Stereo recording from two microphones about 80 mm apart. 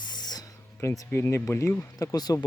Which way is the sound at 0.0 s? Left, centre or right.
Left.